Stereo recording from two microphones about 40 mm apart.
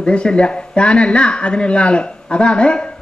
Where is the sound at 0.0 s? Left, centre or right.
Left.